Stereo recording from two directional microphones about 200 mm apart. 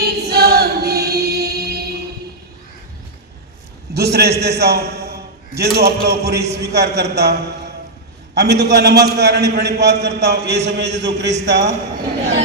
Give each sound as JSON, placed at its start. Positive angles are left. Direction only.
{"t": 0.0, "sound": "choir", "side_deg": -50}
{"t": 3.9, "sound": "a man's voice", "side_deg": -55}
{"t": 8.4, "sound": "a man's voice", "side_deg": -55}